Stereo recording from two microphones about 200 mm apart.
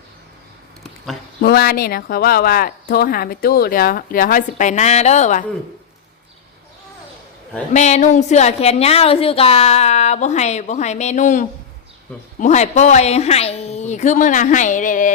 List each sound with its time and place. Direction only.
1.4 s speech: 50° left (ahead or behind)
7.7 s a woman's voice: 35° left (ahead or behind)